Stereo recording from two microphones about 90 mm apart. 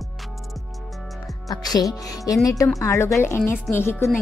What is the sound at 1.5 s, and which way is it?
A woman's voice, 45° left (ahead or behind).